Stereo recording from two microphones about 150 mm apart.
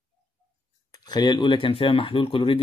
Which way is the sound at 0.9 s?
30° left (ahead or behind).